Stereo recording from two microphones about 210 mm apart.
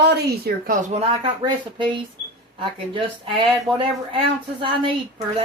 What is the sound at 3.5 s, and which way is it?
Speech, centre (ahead or behind).